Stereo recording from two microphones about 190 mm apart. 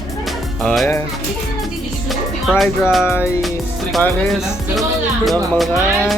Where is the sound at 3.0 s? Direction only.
10° left (ahead or behind).